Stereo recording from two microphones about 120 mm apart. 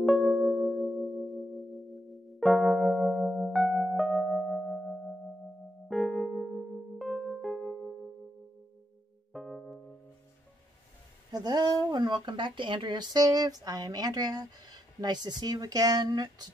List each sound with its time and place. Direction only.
0.0 s singing bowl: centre (ahead or behind)
2.4 s music: centre (ahead or behind)
9.3 s keyboard: centre (ahead or behind)
11.3 s speech: 30° right (ahead or behind)